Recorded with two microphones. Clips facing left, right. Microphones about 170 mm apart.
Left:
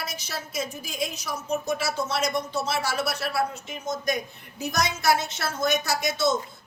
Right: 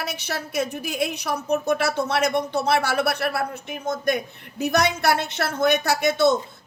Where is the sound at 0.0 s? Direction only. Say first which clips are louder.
Right 5 dB; 65° right (ahead or behind).